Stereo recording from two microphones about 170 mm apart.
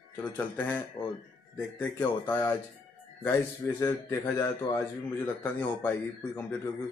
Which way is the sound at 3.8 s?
15° left (ahead or behind).